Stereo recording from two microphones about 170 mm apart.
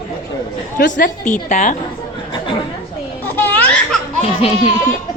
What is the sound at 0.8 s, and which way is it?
Speech, 55° left (ahead or behind).